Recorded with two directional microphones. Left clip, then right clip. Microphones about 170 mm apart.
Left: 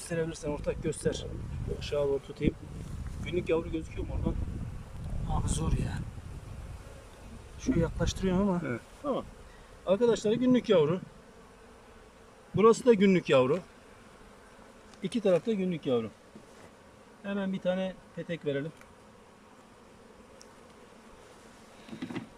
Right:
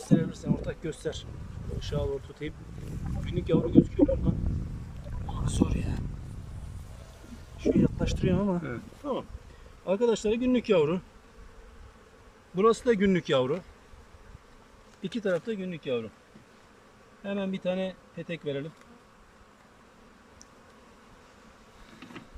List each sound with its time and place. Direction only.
0.1 s speech: 10° left (ahead or behind)
5.5 s speech: centre (ahead or behind)
7.6 s speech: 5° right (ahead or behind)
12.5 s speech: 5° left (ahead or behind)
15.0 s speech: 5° left (ahead or behind)
17.2 s speech: centre (ahead or behind)